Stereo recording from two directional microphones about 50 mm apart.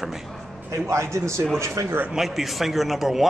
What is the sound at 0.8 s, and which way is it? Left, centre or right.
Speech, right.